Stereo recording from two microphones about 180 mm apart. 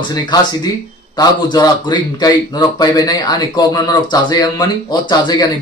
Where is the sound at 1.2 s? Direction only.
25° left (ahead or behind).